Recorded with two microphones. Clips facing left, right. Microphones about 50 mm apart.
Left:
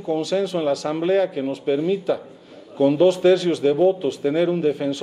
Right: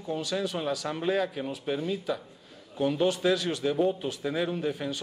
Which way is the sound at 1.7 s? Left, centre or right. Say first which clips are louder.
Left 10 dB; left.